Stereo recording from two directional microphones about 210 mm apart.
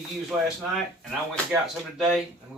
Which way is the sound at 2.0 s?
Centre (ahead or behind).